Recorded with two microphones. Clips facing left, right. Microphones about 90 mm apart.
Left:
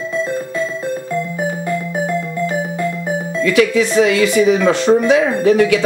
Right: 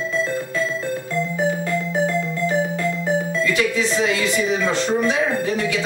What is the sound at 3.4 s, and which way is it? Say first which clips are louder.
Speech: left 7 dB; 70° left (ahead or behind).